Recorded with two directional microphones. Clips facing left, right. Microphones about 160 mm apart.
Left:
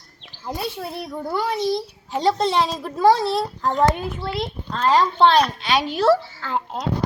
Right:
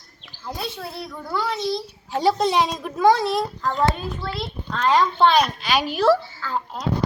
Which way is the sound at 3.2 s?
30° left (ahead or behind).